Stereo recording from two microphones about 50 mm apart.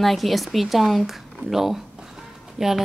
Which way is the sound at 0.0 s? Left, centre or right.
Centre.